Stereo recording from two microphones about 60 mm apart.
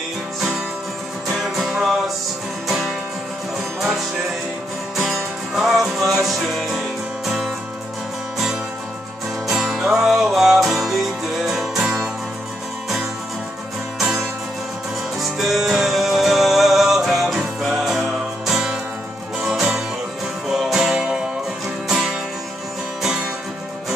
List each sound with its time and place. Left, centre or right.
1.3 s music: centre
4.9 s music: centre
9.5 s music: centre
13.9 s music: centre